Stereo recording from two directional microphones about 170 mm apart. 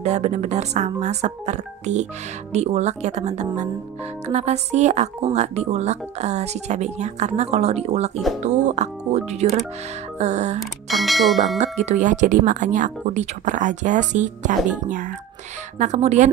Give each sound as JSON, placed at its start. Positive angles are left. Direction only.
{"t": 0.0, "sound": "speech", "side_deg": -40}
{"t": 10.6, "sound": "speech", "side_deg": 0}
{"t": 11.5, "sound": "speech", "side_deg": -40}